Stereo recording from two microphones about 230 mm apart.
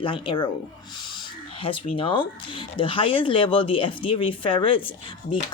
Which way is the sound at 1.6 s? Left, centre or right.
Left.